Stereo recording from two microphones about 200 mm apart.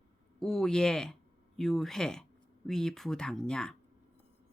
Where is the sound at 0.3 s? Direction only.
Centre (ahead or behind).